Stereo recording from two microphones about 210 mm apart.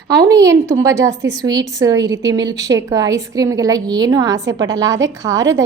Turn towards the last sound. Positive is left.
turn(degrees=-15)  # may be behind; listen again after turning